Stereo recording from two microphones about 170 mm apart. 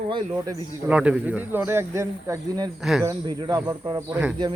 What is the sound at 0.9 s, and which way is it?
Speech, 5° right (ahead or behind).